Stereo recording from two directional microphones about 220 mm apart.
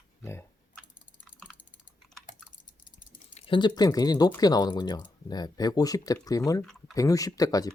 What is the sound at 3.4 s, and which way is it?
Speech, 20° left (ahead or behind).